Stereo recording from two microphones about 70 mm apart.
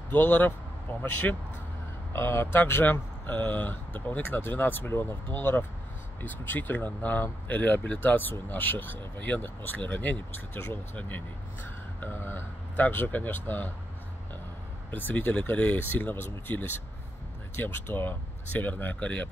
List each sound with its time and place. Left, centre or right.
0.1 s speech: left
2.1 s speech: left
14.9 s speech: left